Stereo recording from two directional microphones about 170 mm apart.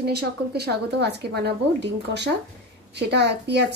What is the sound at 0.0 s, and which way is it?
A woman's voice, 70° right (ahead or behind).